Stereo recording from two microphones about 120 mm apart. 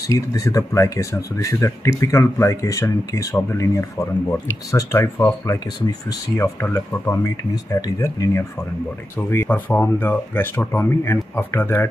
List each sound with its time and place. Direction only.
0.0 s speech: 30° left (ahead or behind)